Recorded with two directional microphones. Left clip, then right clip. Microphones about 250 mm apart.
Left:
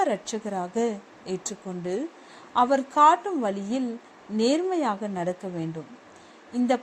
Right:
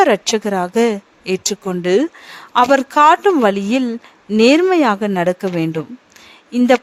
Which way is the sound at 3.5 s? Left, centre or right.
Right.